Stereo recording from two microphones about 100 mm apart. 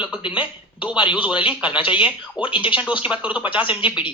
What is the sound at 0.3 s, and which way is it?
Speech, 15° right (ahead or behind).